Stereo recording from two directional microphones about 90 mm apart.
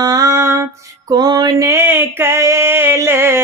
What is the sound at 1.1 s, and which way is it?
Music, 50° right (ahead or behind).